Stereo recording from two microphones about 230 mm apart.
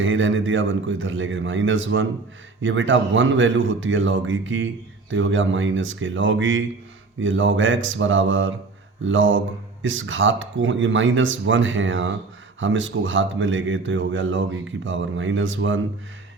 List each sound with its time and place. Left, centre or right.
0.0 s speech: right